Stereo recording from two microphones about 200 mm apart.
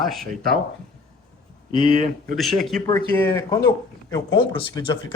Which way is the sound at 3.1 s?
15° left (ahead or behind).